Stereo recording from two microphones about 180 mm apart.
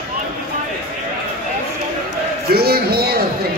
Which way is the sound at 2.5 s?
60° right (ahead or behind).